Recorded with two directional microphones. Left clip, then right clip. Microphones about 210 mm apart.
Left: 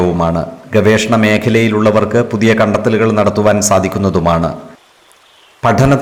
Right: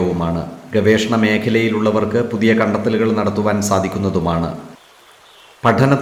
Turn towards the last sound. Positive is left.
turn(degrees=35)  # may be behind; listen again after turning